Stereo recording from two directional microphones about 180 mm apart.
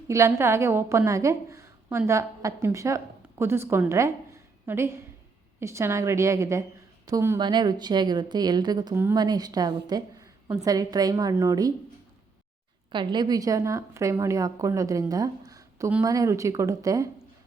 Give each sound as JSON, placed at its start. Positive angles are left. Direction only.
{"t": 0.1, "sound": "a woman's voice", "side_deg": -15}
{"t": 12.9, "sound": "a woman's voice", "side_deg": -25}